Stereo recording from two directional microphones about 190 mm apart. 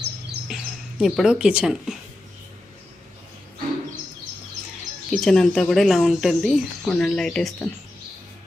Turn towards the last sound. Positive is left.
turn(degrees=5)  # may be behind; listen again after turning